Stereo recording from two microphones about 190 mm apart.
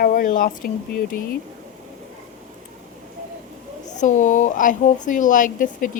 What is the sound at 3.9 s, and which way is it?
Speech, 40° left (ahead or behind).